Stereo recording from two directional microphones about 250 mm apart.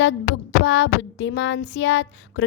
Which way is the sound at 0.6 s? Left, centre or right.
Left.